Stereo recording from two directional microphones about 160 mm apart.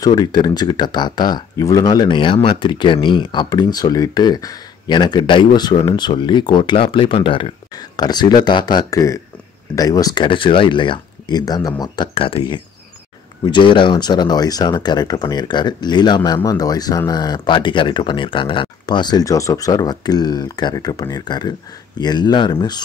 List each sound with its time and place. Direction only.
0.0 s speech: 25° left (ahead or behind)